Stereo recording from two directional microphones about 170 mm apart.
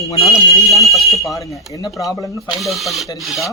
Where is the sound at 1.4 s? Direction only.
20° left (ahead or behind).